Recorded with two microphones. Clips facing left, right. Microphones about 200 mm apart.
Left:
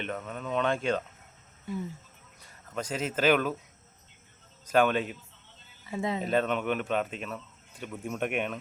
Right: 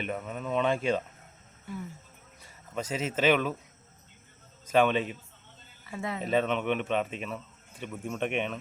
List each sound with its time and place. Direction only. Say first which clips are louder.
0.0 s speech: right 1 dB; 5° right (ahead or behind)
2.7 s speech: even; centre (ahead or behind)
4.7 s speech: even; centre (ahead or behind)
5.9 s speech: left 4 dB; 20° left (ahead or behind)
6.2 s speech: right 2 dB; centre (ahead or behind)